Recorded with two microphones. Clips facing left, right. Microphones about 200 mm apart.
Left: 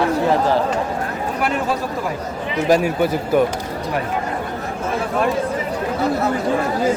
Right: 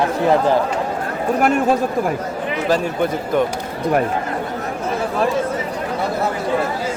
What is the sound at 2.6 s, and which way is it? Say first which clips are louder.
Speech: left 3 dB; 10° left (ahead or behind).